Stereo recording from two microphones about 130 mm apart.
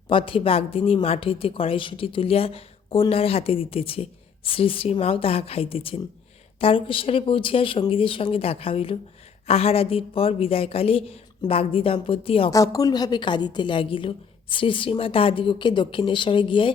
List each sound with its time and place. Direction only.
0.1 s speech: 45° left (ahead or behind)
12.7 s speech: 30° left (ahead or behind)